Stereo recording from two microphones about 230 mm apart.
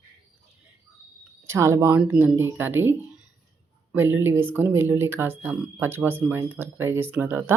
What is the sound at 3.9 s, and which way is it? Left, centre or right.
Speech, centre.